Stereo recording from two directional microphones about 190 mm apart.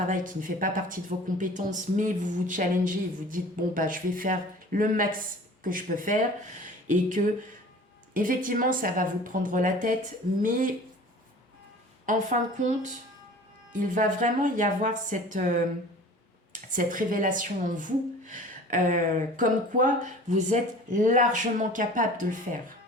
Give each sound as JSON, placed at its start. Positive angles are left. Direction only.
{"t": 0.1, "sound": "speech", "side_deg": -45}
{"t": 12.0, "sound": "speech", "side_deg": -40}
{"t": 16.7, "sound": "speech", "side_deg": -45}